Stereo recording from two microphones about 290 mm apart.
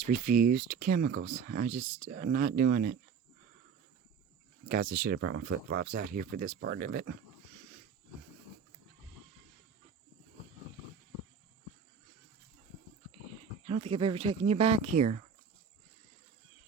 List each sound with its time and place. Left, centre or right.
0.0 s speech: right
4.7 s speech: right
13.7 s speech: right